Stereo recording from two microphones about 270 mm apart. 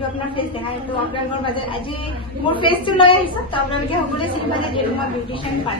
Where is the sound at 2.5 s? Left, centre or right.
Centre.